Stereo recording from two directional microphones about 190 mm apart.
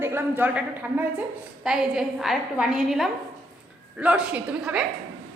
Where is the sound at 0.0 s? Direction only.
10° right (ahead or behind).